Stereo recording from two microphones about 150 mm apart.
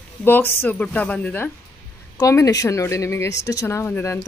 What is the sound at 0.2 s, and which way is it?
A woman's voice, 15° left (ahead or behind).